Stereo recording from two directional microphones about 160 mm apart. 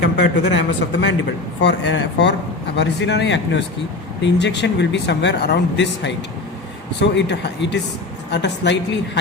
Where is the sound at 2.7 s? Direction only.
90° left.